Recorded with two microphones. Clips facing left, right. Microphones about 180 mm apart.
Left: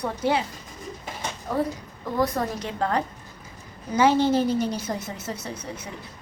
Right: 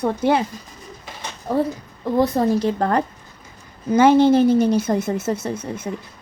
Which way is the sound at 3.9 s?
55° right (ahead or behind).